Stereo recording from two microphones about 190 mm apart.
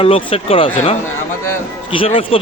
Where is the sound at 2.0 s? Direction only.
30° left (ahead or behind).